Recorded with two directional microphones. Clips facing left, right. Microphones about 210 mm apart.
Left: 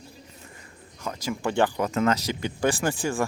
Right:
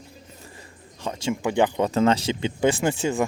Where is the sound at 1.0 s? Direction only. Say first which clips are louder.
Right 3 dB; 25° right (ahead or behind).